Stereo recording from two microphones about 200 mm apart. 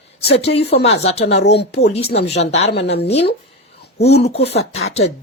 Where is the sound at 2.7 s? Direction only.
55° left (ahead or behind).